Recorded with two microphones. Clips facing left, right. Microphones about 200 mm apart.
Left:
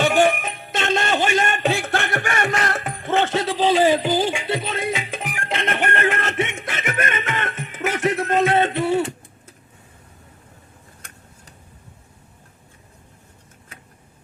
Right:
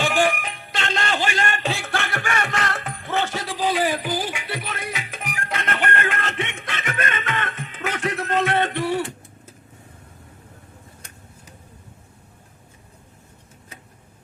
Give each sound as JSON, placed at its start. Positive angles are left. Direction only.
{"t": 0.0, "sound": "music", "side_deg": 20}